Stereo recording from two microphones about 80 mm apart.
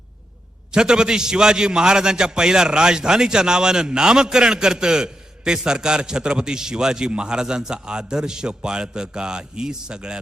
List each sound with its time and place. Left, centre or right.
0.7 s a man's voice: centre